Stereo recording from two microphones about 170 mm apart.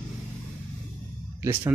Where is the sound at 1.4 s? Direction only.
10° right (ahead or behind).